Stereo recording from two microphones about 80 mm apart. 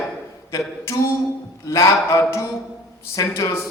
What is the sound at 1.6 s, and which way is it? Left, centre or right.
A man's voice, left.